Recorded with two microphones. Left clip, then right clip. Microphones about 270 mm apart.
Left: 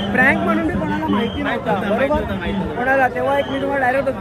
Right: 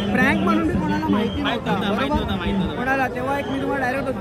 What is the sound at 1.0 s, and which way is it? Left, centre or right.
Speech, centre.